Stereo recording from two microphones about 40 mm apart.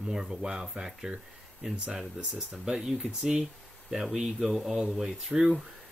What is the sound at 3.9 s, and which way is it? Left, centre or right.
Speech, centre.